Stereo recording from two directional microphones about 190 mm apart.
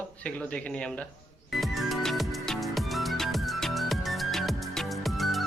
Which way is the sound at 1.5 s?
Centre (ahead or behind).